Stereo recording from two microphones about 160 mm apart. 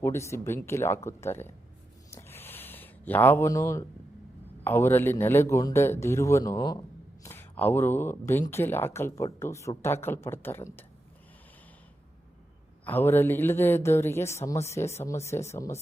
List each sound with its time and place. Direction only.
0.0 s speech: 15° left (ahead or behind)
2.0 s a sound: 15° left (ahead or behind)
4.6 s speech: 15° left (ahead or behind)
12.8 s speech: 10° left (ahead or behind)